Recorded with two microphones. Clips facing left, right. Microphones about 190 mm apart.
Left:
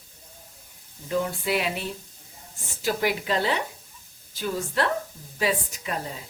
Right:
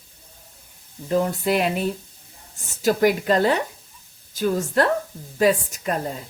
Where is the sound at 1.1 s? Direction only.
45° right (ahead or behind).